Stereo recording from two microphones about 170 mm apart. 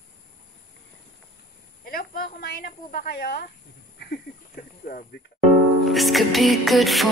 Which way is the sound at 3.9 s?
70° left (ahead or behind).